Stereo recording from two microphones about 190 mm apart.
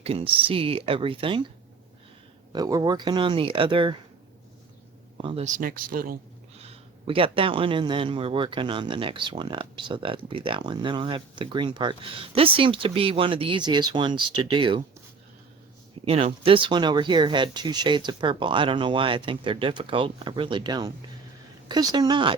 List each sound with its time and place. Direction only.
0.0 s speech: 30° right (ahead or behind)
2.5 s speech: 20° right (ahead or behind)
5.1 s speech: 30° right (ahead or behind)
5.5 s speech: 50° right (ahead or behind)
6.6 s speech: 30° right (ahead or behind)
16.0 s speech: 30° right (ahead or behind)